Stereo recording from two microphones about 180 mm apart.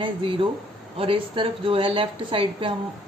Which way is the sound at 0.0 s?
30° right (ahead or behind).